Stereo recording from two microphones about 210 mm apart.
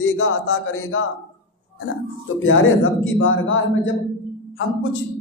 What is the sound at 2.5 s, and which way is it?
A man's voice, 70° left (ahead or behind).